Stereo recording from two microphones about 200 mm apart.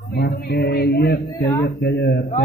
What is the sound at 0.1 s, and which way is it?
Speech, 55° left (ahead or behind).